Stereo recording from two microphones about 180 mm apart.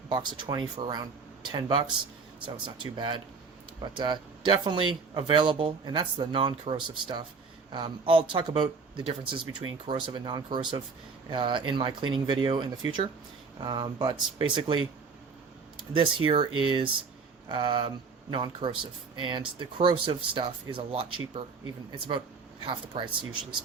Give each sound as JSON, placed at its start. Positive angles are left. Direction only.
{"t": 0.1, "sound": "speech", "side_deg": -25}
{"t": 16.0, "sound": "speech", "side_deg": -30}
{"t": 22.6, "sound": "speech", "side_deg": -25}